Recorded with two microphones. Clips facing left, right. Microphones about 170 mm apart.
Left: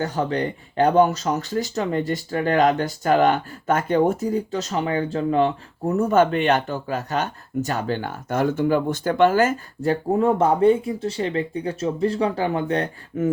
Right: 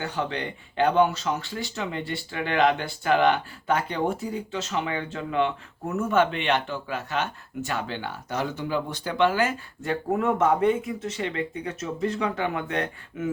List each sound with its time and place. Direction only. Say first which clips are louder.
0.0 s speech: left 6 dB; 40° left (ahead or behind)